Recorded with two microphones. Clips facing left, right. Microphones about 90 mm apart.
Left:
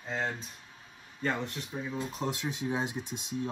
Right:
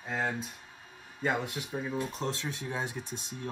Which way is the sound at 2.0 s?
10° left (ahead or behind).